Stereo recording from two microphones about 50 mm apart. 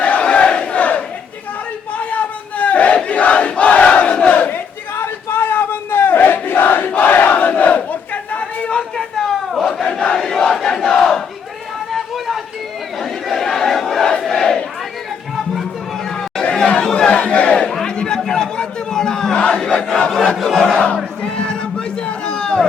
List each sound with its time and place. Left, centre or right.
0.0 s crowd: left
2.0 s battle cry: left
5.0 s battle cry: left
9.5 s crowd: centre
9.8 s crowd: centre
10.2 s battle cry: centre
11.9 s a sound: centre
13.0 s battle cry: centre
16.4 s chatter: left
16.9 s crowd: left
17.7 s chatter: centre
18.3 s crowd: centre
20.1 s a sound: centre
20.8 s a sound: left